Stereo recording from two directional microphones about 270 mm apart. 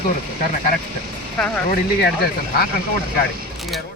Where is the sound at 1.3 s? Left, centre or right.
Centre.